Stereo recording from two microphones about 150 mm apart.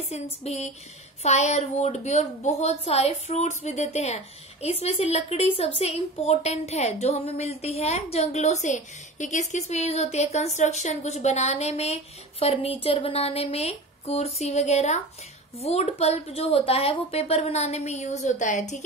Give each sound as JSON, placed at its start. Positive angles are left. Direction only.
{"t": 0.1, "sound": "a woman's voice", "side_deg": 45}